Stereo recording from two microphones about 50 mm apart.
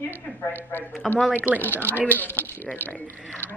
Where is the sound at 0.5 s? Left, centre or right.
Left.